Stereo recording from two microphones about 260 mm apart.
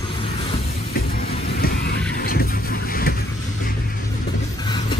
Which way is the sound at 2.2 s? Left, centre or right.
Left.